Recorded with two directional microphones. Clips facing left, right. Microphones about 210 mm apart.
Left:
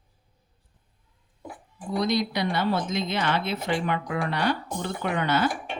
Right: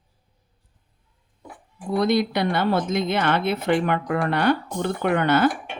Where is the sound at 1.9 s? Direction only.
55° right (ahead or behind).